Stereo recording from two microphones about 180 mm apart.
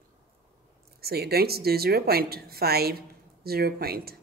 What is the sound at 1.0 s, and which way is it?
A woman's voice, 60° right (ahead or behind).